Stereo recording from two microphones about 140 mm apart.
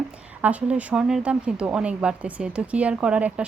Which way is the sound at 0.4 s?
10° right (ahead or behind).